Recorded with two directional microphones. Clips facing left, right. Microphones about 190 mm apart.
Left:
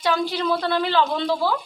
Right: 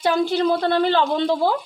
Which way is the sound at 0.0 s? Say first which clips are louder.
Right 4 dB; 50° right (ahead or behind).